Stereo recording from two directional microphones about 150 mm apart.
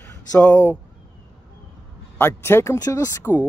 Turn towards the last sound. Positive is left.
turn(degrees=20)  # may be behind; listen again after turning